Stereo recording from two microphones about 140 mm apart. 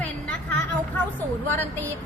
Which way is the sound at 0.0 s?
10° left (ahead or behind).